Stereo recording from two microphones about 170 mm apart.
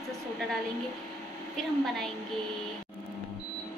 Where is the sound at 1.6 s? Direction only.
Centre (ahead or behind).